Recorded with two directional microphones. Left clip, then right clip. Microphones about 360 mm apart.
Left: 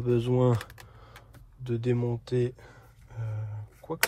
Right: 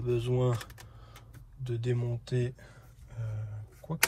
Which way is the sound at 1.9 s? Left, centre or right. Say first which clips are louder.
Left 6 dB; centre.